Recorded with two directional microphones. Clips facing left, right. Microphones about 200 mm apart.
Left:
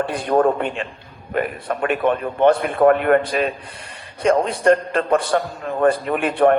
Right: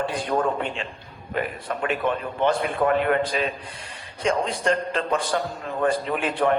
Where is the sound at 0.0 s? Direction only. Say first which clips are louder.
Left 6 dB; 60° left (ahead or behind).